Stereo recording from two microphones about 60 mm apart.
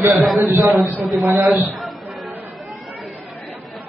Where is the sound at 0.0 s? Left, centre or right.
Centre.